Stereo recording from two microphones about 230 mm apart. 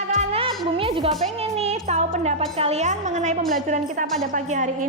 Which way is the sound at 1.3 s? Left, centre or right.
Right.